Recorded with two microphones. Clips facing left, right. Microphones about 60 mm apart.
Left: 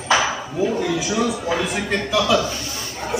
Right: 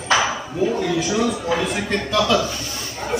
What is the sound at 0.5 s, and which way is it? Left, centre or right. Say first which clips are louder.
A man's voice: right 1 dB; centre.